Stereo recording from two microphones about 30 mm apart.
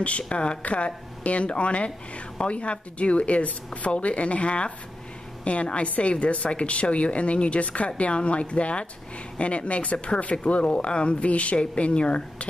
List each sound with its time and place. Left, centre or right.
0.3 s speech: left
0.6 s a woman's voice: left
11.6 s speech: left